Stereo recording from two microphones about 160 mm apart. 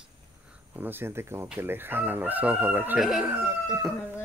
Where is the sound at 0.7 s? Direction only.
15° right (ahead or behind).